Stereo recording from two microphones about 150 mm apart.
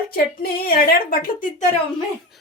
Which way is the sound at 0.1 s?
85° left.